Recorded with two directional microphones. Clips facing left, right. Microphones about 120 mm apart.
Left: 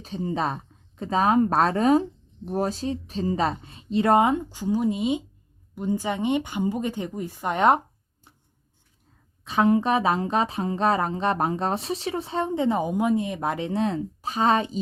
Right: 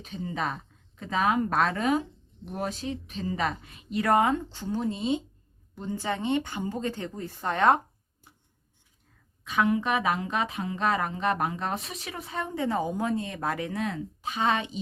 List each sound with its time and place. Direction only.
0.0 s speech: 35° left (ahead or behind); by 7.8 s 20° left (ahead or behind)
9.4 s speech: 30° left (ahead or behind)